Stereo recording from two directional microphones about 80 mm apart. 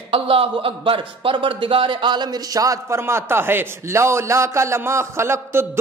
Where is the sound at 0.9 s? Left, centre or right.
Right.